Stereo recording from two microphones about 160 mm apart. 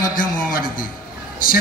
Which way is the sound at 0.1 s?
60° left (ahead or behind).